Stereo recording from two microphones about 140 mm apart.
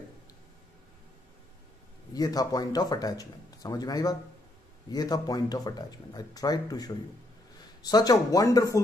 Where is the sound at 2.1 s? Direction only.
25° left (ahead or behind).